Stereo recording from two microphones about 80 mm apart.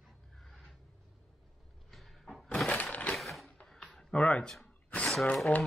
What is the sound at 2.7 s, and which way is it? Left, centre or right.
Crushing, centre.